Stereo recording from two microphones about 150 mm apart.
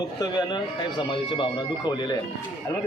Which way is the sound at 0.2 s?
25° left (ahead or behind).